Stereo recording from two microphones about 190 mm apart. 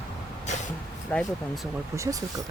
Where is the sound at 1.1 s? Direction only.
Centre (ahead or behind).